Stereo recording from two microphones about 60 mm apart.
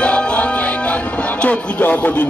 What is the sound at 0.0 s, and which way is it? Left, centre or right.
Music, centre.